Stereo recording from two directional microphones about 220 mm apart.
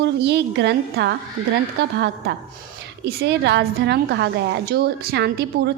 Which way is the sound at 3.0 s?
50° right (ahead or behind).